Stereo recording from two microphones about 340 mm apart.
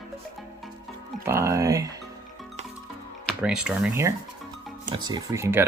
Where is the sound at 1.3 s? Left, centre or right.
Centre.